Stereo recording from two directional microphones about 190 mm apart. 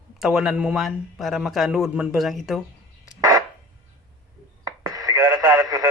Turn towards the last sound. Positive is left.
turn(degrees=-20)  # may be behind; listen again after turning